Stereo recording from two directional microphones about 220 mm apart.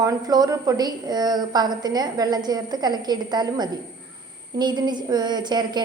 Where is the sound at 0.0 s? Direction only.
15° right (ahead or behind).